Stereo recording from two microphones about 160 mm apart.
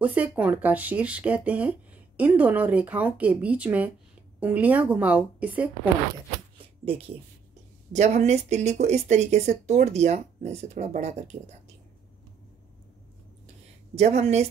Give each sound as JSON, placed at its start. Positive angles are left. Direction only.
{"t": 0.0, "sound": "speech", "side_deg": -10}
{"t": 6.6, "sound": "a sound", "side_deg": -35}
{"t": 7.9, "sound": "speech", "side_deg": -45}
{"t": 13.9, "sound": "speech", "side_deg": -45}